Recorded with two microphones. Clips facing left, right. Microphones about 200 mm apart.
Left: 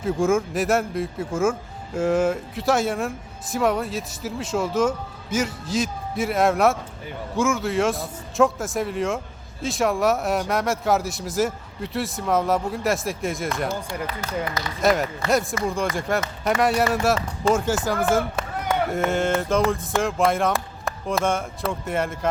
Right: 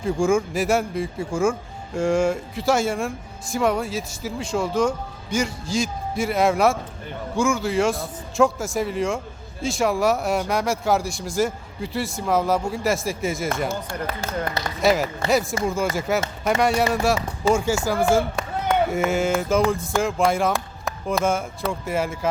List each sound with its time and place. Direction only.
0.0 s speech: centre (ahead or behind)
14.8 s speech: centre (ahead or behind)